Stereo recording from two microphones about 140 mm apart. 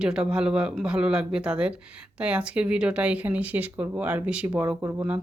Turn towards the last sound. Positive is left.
turn(degrees=-20)  # may be behind; listen again after turning